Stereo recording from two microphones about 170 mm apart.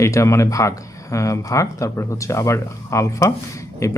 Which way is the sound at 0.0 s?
15° left (ahead or behind).